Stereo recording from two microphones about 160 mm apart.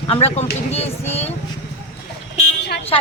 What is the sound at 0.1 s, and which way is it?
Speech, 40° left (ahead or behind).